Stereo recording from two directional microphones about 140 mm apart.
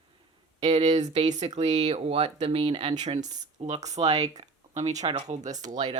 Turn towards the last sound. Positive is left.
turn(degrees=-25)  # may be behind; listen again after turning